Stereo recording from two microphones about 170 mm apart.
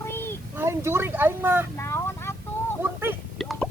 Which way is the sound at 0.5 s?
15° right (ahead or behind).